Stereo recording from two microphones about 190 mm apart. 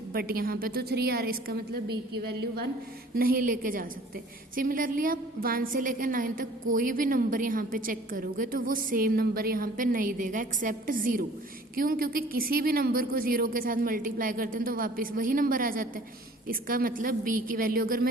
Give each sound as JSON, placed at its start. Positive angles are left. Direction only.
{"t": 0.1, "sound": "a woman's voice", "side_deg": -50}
{"t": 3.2, "sound": "a woman's voice", "side_deg": -50}